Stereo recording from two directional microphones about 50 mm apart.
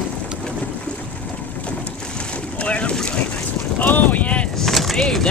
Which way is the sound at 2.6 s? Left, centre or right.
Left.